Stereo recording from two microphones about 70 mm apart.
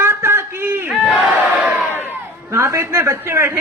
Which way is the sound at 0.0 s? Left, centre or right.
Right.